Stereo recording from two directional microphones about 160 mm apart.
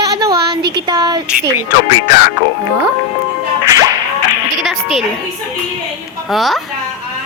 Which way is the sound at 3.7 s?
20° right (ahead or behind).